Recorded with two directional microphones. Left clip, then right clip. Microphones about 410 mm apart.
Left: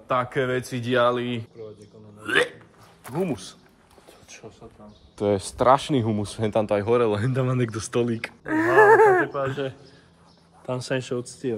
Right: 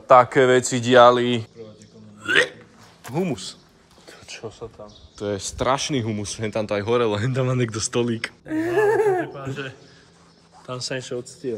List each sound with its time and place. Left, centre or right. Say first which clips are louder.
0.1 s speech: right 10 dB; centre
2.2 s hiccup: right 3 dB; centre
3.2 s speech: right 2 dB; centre
4.3 s a sound: right 9 dB; centre
5.1 s speech: left 4 dB; centre
10.7 s speech: left 1 dB; centre